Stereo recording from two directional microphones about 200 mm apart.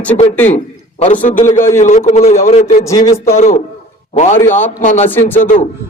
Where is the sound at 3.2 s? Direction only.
35° left (ahead or behind).